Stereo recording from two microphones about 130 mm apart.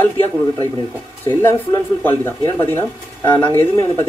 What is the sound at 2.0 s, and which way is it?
Speech, 15° left (ahead or behind).